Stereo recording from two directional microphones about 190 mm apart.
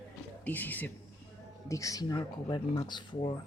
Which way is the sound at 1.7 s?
15° left (ahead or behind).